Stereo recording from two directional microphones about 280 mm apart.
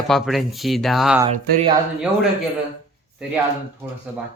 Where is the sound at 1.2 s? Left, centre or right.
Centre.